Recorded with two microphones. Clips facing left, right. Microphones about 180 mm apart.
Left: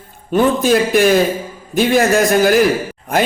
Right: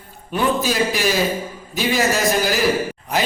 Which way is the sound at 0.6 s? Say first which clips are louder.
Left 8 dB; 50° left (ahead or behind).